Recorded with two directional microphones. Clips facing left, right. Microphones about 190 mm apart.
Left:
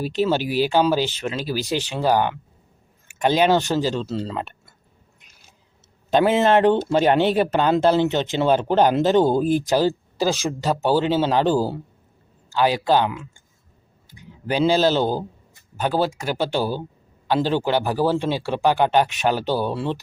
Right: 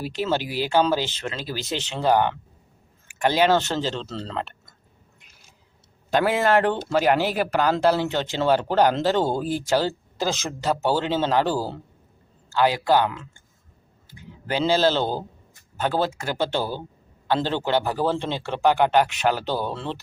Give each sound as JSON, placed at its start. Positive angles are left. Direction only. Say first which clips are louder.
{"t": 0.0, "sound": "speech", "louder": "left 4 dB", "side_deg": 20}
{"t": 0.4, "sound": "speech", "louder": "left 6 dB", "side_deg": -15}
{"t": 0.7, "sound": "speech", "louder": "right 1 dB", "side_deg": 15}
{"t": 6.1, "sound": "speech", "louder": "left 4 dB", "side_deg": 20}